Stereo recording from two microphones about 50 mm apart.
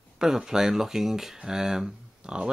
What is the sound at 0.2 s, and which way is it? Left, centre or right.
Speech, centre.